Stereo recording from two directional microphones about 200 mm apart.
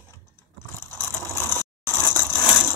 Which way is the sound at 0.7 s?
10° left (ahead or behind).